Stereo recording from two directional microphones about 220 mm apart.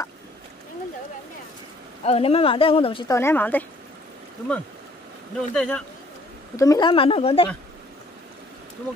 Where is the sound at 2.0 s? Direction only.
25° left (ahead or behind); by 3.6 s 10° left (ahead or behind).